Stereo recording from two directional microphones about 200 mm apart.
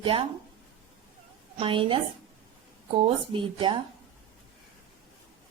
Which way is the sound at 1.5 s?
25° right (ahead or behind).